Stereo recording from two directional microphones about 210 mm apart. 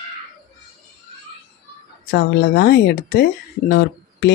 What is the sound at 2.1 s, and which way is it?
Speech, 50° left (ahead or behind).